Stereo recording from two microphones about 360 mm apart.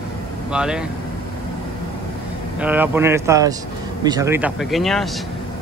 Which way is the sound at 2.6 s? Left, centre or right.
Centre.